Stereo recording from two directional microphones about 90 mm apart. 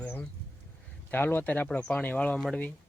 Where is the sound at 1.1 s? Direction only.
25° left (ahead or behind).